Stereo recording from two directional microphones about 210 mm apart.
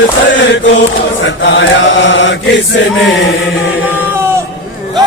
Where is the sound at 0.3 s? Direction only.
60° left (ahead or behind).